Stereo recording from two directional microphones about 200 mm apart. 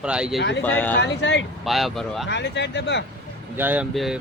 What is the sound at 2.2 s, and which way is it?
Speech, 60° left (ahead or behind).